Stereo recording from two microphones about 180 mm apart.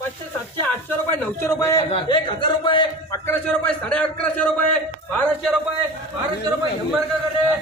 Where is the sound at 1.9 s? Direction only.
30° left (ahead or behind).